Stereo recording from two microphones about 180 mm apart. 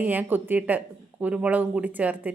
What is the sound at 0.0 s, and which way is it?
Speech, 10° right (ahead or behind).